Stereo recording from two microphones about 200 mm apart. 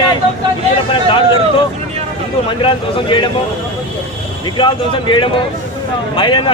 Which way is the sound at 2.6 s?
25° left (ahead or behind).